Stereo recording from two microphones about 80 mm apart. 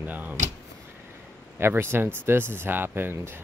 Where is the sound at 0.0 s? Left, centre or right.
Right.